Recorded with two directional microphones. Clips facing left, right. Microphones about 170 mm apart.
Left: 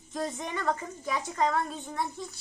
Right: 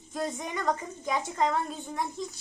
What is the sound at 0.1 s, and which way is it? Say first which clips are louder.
A woman's voice: even; 10° right (ahead or behind).